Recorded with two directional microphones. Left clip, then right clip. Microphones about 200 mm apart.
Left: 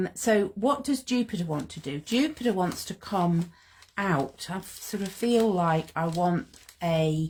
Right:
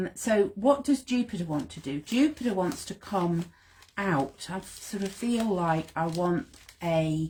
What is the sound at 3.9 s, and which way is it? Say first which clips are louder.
Speech: left 1 dB; 45° left (ahead or behind).